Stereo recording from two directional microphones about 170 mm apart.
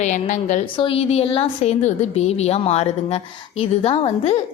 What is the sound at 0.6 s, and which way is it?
A woman's voice, 30° left (ahead or behind).